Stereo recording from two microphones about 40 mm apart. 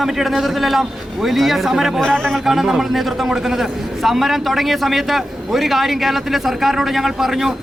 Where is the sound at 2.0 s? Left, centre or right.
Centre.